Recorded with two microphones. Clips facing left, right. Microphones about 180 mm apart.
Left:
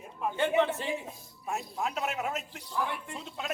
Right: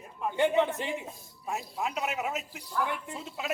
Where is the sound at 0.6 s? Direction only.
15° right (ahead or behind).